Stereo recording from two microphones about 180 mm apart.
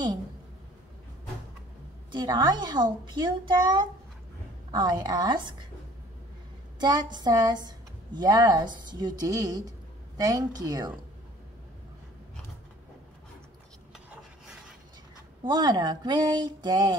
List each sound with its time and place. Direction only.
2.1 s a woman's voice: 25° right (ahead or behind)
6.8 s a woman's voice: 25° right (ahead or behind)
15.4 s a woman's voice: 25° right (ahead or behind)